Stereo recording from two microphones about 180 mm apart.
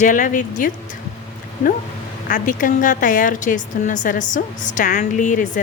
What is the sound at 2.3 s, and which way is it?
A woman's voice, 45° left (ahead or behind).